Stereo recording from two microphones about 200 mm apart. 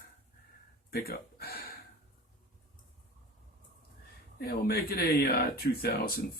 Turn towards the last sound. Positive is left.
turn(degrees=50)  # may be behind; listen again after turning